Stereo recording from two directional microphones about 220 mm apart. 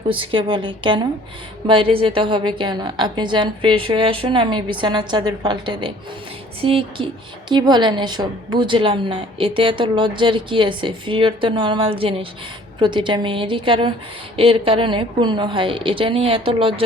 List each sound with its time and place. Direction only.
0.1 s a woman's voice: 25° right (ahead or behind)